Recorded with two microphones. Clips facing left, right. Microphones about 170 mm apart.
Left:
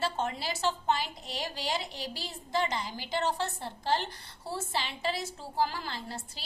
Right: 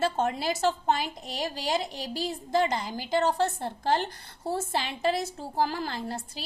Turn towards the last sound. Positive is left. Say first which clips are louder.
# right 6 dB
turn(degrees=-45)  # may be behind; listen again after turning